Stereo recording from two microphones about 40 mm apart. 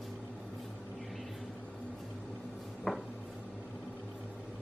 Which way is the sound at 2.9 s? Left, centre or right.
Centre.